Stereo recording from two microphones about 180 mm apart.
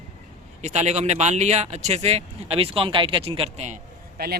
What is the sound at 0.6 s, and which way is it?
Speech, 40° right (ahead or behind).